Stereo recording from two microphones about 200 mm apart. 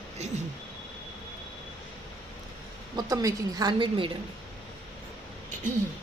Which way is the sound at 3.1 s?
20° right (ahead or behind).